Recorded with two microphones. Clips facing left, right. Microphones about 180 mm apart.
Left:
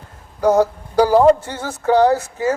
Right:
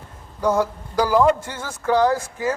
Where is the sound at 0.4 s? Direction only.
35° left (ahead or behind).